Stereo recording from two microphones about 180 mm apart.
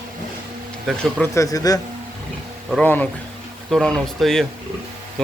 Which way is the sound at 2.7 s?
10° left (ahead or behind).